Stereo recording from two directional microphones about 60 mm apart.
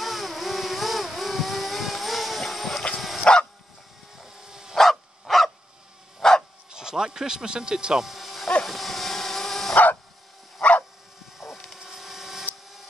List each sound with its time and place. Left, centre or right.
0.0 s vehicle: centre
3.3 s dog: centre
4.2 s insect: centre
4.7 s dog: centre
6.7 s speech: centre
8.6 s dog: centre
10.6 s dog: left
11.3 s vehicle: centre